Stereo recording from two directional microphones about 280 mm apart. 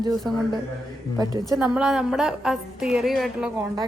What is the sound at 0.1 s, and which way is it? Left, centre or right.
Speech, centre.